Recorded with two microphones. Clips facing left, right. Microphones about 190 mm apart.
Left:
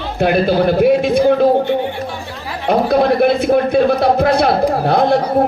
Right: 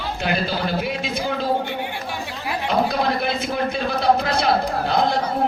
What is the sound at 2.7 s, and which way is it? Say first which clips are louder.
Speech: left 9 dB; 55° left (ahead or behind).